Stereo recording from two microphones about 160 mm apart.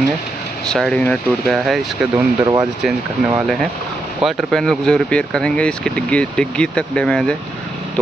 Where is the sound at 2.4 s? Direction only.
25° right (ahead or behind).